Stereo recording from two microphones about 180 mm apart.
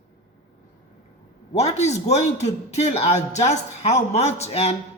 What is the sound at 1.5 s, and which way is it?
A man's voice, 35° left (ahead or behind).